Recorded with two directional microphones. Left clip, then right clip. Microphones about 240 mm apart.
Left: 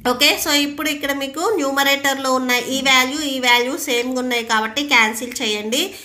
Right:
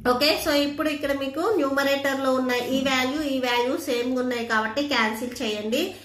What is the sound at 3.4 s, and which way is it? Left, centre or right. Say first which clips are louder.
A woman's voice: left 9 dB; left.